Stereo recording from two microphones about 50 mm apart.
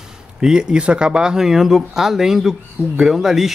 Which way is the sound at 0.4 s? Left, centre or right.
Centre.